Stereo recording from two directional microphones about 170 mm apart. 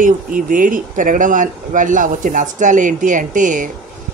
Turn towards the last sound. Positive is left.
turn(degrees=-50)  # may be behind; listen again after turning